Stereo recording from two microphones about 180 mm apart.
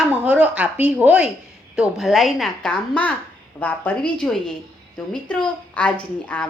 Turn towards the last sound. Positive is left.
turn(degrees=5)  # may be behind; listen again after turning